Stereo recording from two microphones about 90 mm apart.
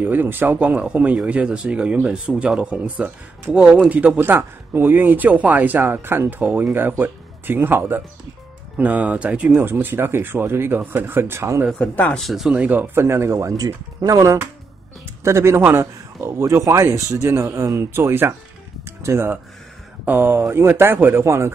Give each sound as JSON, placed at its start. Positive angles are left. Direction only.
{"t": 0.0, "sound": "speech", "side_deg": -20}
{"t": 11.8, "sound": "speech", "side_deg": 15}
{"t": 12.2, "sound": "speech", "side_deg": 0}
{"t": 12.5, "sound": "speech", "side_deg": -15}